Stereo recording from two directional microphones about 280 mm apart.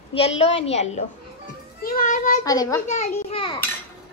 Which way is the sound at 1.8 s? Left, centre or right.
Left.